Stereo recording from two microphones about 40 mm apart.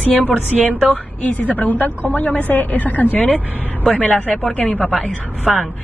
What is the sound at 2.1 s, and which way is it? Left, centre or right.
Speech, left.